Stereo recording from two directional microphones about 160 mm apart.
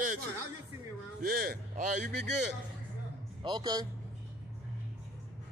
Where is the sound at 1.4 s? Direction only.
70° right (ahead or behind).